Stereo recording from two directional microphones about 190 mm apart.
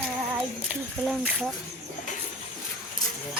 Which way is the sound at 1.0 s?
Centre (ahead or behind).